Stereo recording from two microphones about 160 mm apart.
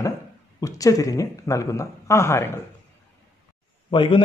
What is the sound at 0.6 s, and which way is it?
Speech, 20° left (ahead or behind).